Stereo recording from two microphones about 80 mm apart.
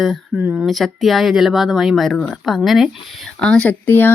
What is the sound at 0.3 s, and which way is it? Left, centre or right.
Speech, right.